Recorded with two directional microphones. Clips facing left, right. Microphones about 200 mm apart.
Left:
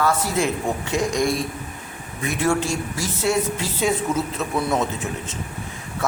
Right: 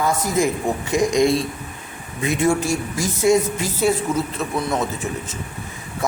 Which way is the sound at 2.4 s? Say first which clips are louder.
Right 2 dB; 10° right (ahead or behind).